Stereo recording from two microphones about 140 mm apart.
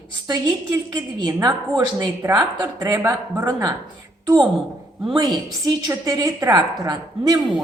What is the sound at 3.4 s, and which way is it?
Speech, 30° right (ahead or behind).